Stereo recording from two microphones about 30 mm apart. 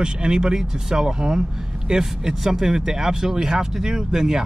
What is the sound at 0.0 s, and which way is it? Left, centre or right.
Speech, right.